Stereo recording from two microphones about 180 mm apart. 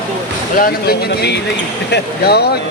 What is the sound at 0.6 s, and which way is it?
Speech, 65° left (ahead or behind).